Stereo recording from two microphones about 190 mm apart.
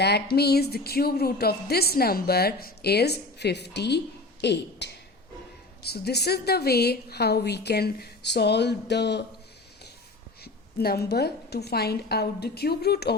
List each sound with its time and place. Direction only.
0.0 s speech: 60° left (ahead or behind)
10.4 s speech: 55° left (ahead or behind)